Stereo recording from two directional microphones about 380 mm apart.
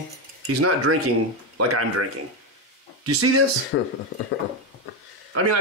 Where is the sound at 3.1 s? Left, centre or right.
Right.